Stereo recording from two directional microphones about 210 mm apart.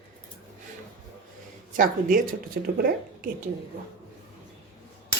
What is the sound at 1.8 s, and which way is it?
Speech, 40° right (ahead or behind).